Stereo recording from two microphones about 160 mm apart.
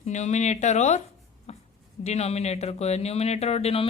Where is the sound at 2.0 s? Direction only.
40° left (ahead or behind).